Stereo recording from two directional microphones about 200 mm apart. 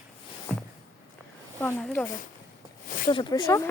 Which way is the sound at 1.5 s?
10° left (ahead or behind).